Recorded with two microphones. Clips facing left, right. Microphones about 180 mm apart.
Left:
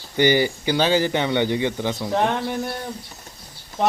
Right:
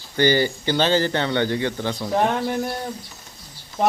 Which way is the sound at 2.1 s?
5° right (ahead or behind).